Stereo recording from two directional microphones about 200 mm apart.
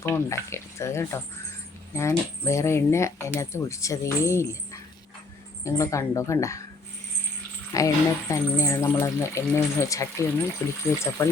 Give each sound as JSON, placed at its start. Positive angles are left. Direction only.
{"t": 0.0, "sound": "speech", "side_deg": 15}
{"t": 7.7, "sound": "speech", "side_deg": 15}